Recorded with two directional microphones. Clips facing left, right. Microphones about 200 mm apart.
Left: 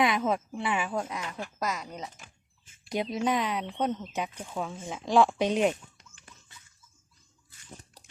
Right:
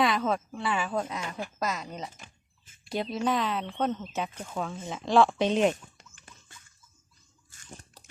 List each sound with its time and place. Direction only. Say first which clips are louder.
0.0 s speech: even; 20° left (ahead or behind)